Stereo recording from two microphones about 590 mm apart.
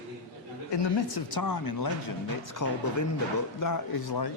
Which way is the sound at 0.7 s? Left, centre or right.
Left.